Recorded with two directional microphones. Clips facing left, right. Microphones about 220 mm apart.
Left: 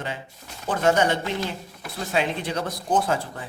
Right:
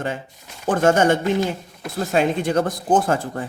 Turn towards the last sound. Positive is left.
turn(degrees=-50)  # may be behind; listen again after turning